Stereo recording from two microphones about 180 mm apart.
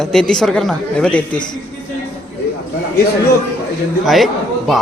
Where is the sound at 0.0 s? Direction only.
5° left (ahead or behind).